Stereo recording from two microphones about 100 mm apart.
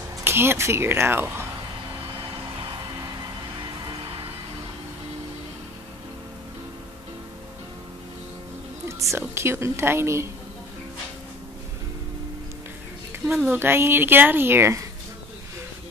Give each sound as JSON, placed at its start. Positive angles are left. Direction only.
{"t": 0.2, "sound": "speech", "side_deg": -25}
{"t": 8.8, "sound": "music", "side_deg": -30}
{"t": 9.3, "sound": "speech", "side_deg": -25}
{"t": 13.5, "sound": "speech", "side_deg": -20}